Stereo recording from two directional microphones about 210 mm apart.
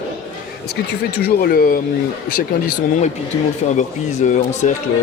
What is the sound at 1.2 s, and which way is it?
Speech, 45° left (ahead or behind).